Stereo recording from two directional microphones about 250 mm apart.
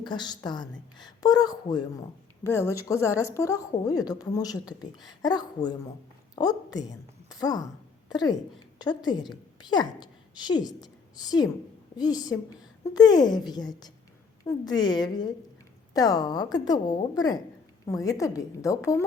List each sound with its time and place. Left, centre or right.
0.0 s a woman's voice: centre